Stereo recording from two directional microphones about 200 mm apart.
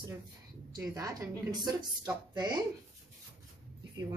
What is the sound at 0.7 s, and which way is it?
A woman's voice, 15° right (ahead or behind).